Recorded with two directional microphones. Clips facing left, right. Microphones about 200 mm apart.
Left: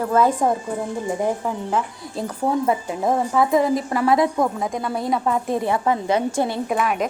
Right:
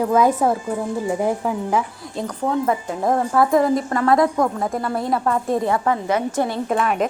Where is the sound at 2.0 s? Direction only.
Centre (ahead or behind).